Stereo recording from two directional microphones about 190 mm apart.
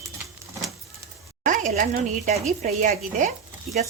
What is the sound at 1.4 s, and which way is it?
Speech, 40° right (ahead or behind).